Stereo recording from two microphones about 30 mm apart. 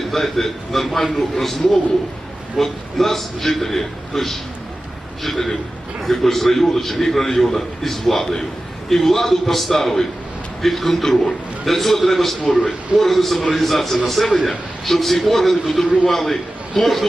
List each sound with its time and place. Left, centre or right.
0.1 s a man's voice: centre